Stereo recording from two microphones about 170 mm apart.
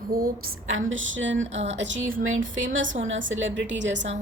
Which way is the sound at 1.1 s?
90° right.